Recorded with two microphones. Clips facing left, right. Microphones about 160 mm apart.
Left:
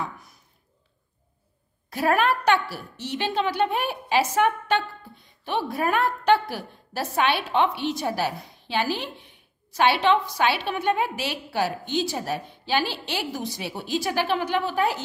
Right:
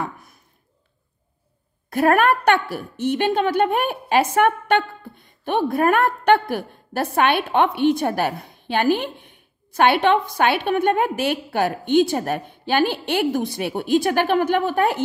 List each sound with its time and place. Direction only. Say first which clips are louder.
1.9 s a woman's voice: right 5 dB; 55° right (ahead or behind)